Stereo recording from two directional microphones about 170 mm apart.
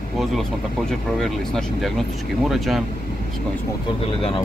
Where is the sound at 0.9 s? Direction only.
Centre (ahead or behind).